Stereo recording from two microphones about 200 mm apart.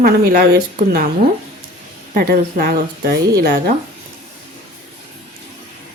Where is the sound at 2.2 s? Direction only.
45° right (ahead or behind).